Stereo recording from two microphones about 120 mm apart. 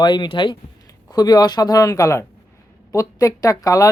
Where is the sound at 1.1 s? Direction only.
35° left (ahead or behind).